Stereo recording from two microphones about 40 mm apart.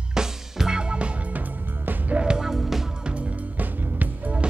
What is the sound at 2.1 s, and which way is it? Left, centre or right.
Music, right.